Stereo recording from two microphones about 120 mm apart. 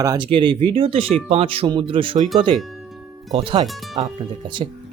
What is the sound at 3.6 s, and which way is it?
Speech, centre (ahead or behind).